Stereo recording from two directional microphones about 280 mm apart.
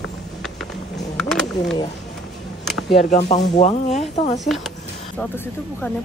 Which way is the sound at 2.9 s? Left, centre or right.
Left.